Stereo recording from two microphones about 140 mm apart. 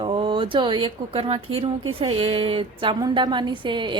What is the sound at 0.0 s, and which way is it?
A woman's voice, 35° right (ahead or behind).